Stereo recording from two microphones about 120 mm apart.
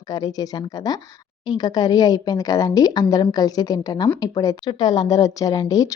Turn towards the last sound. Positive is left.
turn(degrees=30)  # may be behind; listen again after turning